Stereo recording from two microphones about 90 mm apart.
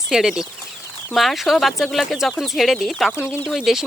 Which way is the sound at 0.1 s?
5° right (ahead or behind).